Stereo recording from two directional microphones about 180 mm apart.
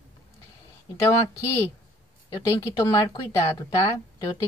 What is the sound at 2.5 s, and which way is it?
Speech, 20° left (ahead or behind).